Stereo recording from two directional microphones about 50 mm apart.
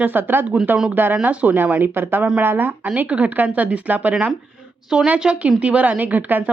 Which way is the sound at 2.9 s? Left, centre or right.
Right.